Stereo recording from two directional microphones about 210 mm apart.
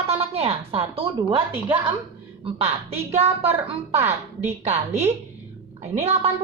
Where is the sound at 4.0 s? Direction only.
10° right (ahead or behind).